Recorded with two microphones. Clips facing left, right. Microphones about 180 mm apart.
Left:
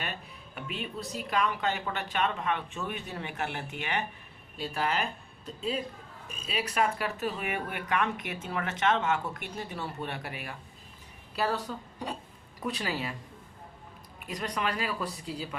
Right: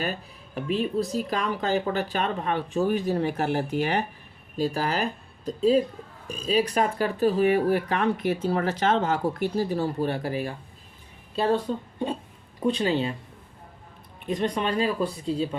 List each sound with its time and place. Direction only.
0.0 s a woman's voice: 35° right (ahead or behind)
14.3 s speech: 25° right (ahead or behind)